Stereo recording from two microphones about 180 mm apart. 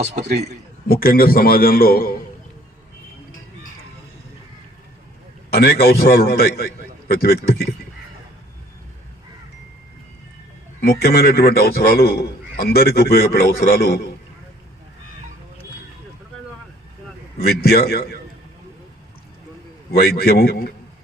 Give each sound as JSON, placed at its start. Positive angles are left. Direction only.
{"t": 0.0, "sound": "a man's voice", "side_deg": -40}
{"t": 0.9, "sound": "a man's voice", "side_deg": 55}
{"t": 5.5, "sound": "a man's voice", "side_deg": 60}
{"t": 10.8, "sound": "a man's voice", "side_deg": 60}
{"t": 17.3, "sound": "a man's voice", "side_deg": 60}
{"t": 19.9, "sound": "a man's voice", "side_deg": 60}